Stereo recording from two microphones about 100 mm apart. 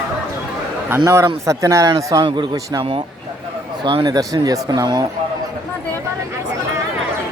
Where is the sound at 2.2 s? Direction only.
55° right (ahead or behind).